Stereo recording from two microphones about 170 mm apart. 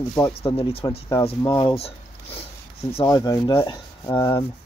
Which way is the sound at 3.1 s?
20° left (ahead or behind).